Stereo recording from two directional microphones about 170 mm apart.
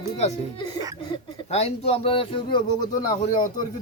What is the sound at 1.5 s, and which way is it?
Speech, 40° left (ahead or behind).